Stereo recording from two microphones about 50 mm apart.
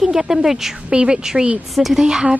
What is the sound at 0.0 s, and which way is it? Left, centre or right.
Speech, centre.